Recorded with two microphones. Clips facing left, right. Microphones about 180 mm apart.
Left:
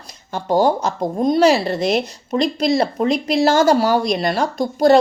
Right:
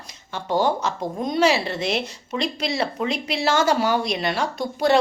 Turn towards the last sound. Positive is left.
turn(degrees=40)  # may be behind; listen again after turning